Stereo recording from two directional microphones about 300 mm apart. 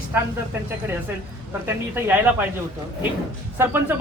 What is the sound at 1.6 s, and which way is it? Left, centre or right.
Speech, centre.